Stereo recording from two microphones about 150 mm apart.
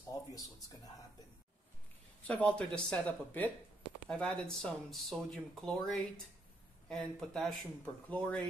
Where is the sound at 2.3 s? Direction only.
10° left (ahead or behind).